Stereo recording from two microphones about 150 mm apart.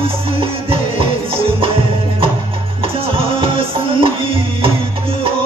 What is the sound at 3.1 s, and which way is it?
Music, 40° right (ahead or behind).